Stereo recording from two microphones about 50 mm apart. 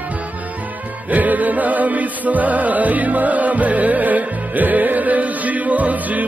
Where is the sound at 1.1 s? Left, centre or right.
Right.